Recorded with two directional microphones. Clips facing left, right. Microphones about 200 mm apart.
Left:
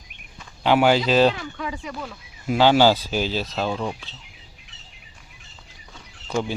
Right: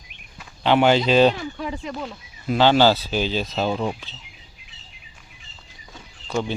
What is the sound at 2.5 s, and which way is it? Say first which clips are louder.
Speech: even; 10° left (ahead or behind).